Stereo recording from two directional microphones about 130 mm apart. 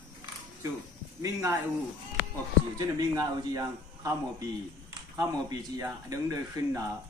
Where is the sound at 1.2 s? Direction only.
20° right (ahead or behind).